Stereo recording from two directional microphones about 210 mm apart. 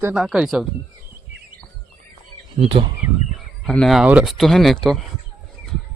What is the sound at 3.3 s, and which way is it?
Speech, centre (ahead or behind).